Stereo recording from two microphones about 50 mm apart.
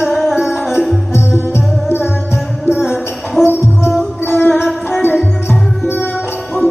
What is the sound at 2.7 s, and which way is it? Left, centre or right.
Music, centre.